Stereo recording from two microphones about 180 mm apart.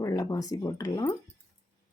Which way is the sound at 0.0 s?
20° left (ahead or behind).